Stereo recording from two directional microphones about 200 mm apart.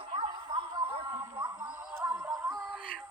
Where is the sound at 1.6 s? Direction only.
10° right (ahead or behind).